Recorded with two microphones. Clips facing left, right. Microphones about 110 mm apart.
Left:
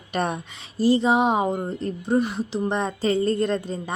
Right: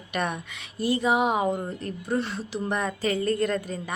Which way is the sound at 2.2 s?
15° left (ahead or behind).